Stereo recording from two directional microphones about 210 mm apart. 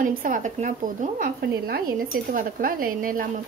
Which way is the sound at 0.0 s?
40° right (ahead or behind).